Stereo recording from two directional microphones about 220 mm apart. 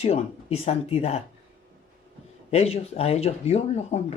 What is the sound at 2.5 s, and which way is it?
Speech, 30° left (ahead or behind).